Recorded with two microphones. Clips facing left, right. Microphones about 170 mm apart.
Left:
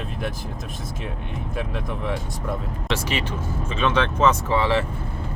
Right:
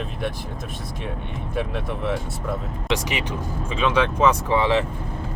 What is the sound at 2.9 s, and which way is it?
Speech, 15° right (ahead or behind).